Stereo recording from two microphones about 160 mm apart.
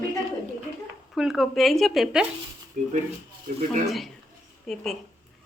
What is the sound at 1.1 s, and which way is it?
A woman's voice, centre (ahead or behind).